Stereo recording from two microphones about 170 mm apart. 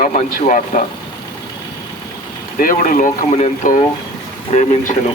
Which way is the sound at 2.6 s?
55° left (ahead or behind).